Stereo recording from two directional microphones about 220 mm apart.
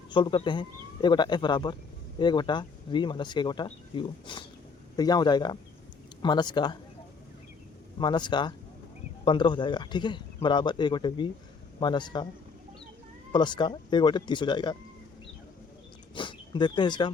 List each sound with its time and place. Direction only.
0.1 s speech: 20° left (ahead or behind)
7.9 s speech: 20° left (ahead or behind)
13.3 s speech: 20° left (ahead or behind)
16.1 s speech: 20° left (ahead or behind)